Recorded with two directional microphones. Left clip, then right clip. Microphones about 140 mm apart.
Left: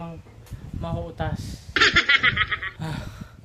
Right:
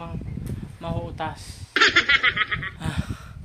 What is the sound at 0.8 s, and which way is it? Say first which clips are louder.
Speech: even; 20° left (ahead or behind).